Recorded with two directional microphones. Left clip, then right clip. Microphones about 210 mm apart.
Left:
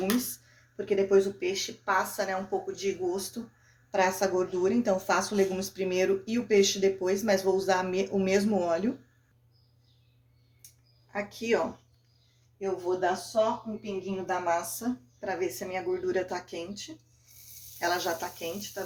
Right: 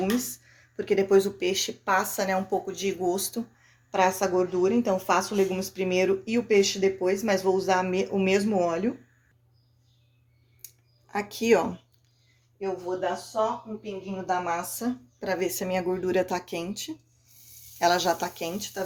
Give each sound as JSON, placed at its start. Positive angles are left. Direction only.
{"t": 0.0, "sound": "speech", "side_deg": -25}
{"t": 3.9, "sound": "a woman's voice", "side_deg": -20}
{"t": 11.1, "sound": "speech", "side_deg": -45}
{"t": 12.9, "sound": "a woman's voice", "side_deg": -5}
{"t": 14.3, "sound": "speech", "side_deg": -20}
{"t": 14.6, "sound": "speech", "side_deg": -45}